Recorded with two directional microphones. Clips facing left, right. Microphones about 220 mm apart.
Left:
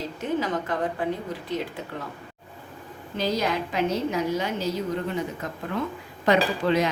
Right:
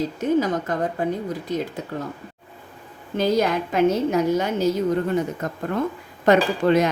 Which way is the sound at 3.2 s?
50° right (ahead or behind).